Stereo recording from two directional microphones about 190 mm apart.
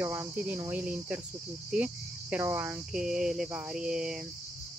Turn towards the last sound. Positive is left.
turn(degrees=-5)  # may be behind; listen again after turning